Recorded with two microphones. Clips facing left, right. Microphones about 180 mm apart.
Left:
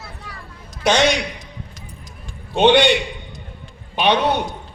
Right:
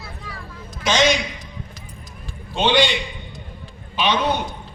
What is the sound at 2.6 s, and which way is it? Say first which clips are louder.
A man's voice: left 5 dB; 60° left (ahead or behind).